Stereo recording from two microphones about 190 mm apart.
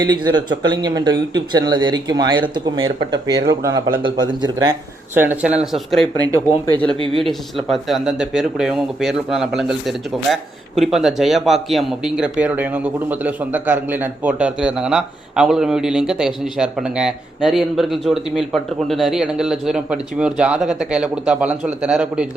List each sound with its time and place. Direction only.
0.0 s speech: 20° right (ahead or behind)
5.1 s speech: 10° right (ahead or behind)
7.1 s speech: centre (ahead or behind)